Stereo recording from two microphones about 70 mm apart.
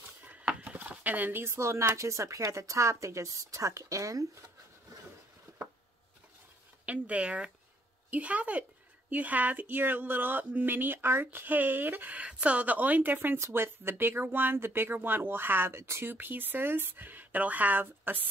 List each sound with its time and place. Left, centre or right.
0.3 s speech: centre; by 4.5 s right
6.9 s speech: centre